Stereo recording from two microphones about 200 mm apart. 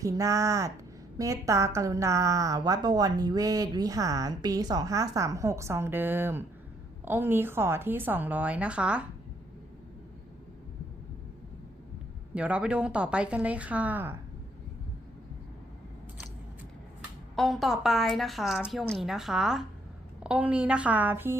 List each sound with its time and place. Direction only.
0.0 s a woman's voice: 15° right (ahead or behind)
12.3 s a woman's voice: 5° right (ahead or behind)
17.0 s a woman's voice: centre (ahead or behind)